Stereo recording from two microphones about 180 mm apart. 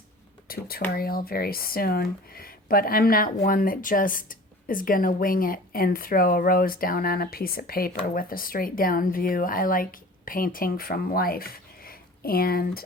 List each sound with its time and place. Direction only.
0.4 s speech: 55° left (ahead or behind)